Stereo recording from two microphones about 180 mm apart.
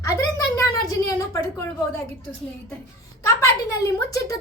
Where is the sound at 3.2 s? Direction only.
15° left (ahead or behind).